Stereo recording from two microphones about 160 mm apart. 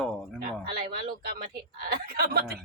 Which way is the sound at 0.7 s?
80° right.